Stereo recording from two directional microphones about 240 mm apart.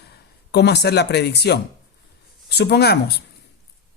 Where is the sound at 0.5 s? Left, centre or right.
Left.